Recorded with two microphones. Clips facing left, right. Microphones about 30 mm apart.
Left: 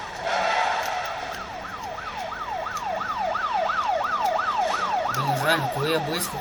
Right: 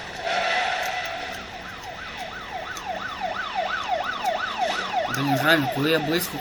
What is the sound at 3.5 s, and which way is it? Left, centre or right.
Emergency vehicle, centre.